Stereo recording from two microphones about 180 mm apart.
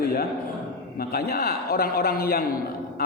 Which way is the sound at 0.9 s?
55° left (ahead or behind).